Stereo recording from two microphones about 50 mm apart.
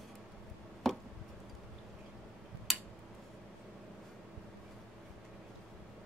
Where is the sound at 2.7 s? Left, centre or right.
Centre.